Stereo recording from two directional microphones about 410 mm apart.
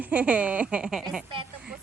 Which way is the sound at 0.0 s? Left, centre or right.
Centre.